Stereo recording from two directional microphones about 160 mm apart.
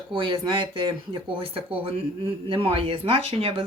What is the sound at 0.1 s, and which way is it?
Speech, 30° right (ahead or behind).